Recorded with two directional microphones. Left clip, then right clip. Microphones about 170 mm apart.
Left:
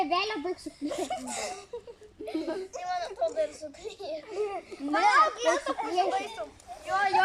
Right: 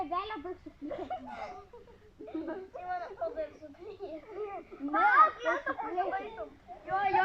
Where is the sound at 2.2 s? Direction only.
25° left (ahead or behind).